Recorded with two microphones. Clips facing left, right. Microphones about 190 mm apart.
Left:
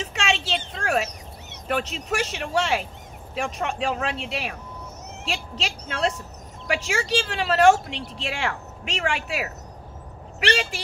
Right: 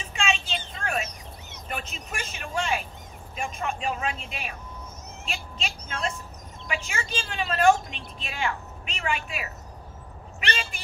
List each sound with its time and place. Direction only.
0.0 s a sound: 90° left
3.3 s speech: 90° left
6.7 s a woman's voice: 90° left